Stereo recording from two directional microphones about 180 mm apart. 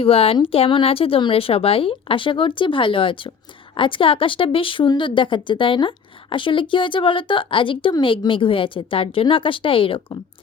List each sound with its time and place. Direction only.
0.0 s a woman's voice: 30° left (ahead or behind)